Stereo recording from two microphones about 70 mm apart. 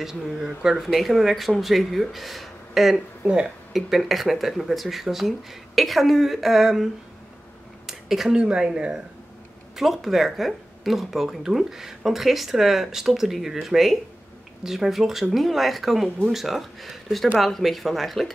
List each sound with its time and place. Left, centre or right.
0.0 s speech: centre